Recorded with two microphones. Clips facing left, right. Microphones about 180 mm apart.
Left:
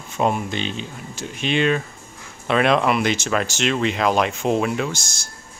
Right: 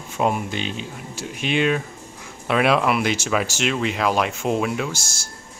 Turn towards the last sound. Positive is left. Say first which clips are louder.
# left 2 dB
turn(degrees=-5)  # may be behind; listen again after turning